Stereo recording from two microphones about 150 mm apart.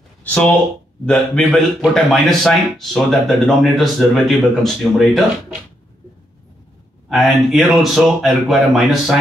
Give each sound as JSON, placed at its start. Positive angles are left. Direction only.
{"t": 0.2, "sound": "a man's voice", "side_deg": 10}
{"t": 7.1, "sound": "a man's voice", "side_deg": 0}